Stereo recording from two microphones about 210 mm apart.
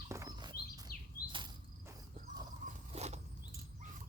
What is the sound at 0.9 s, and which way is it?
Bird vocalization, 45° left (ahead or behind).